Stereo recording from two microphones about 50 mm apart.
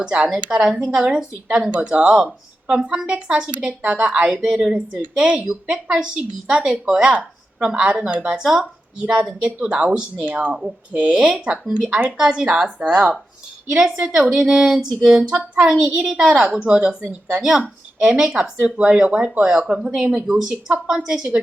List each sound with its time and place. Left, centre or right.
0.0 s speech: right
0.5 s speech: centre; by 8.4 s right
8.4 s a woman's voice: centre